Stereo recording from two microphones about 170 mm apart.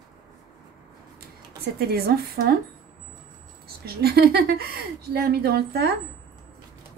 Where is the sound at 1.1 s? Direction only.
65° right (ahead or behind).